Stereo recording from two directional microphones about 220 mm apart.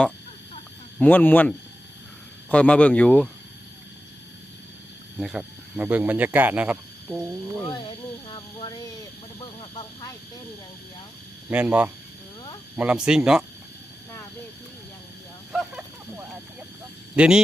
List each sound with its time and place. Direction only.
0.9 s speech: 10° left (ahead or behind)
5.2 s speech: 5° right (ahead or behind)
8.3 s speech: 20° left (ahead or behind)
11.4 s speech: 5° right (ahead or behind)
15.5 s a sound: 5° right (ahead or behind)
17.2 s speech: 5° right (ahead or behind)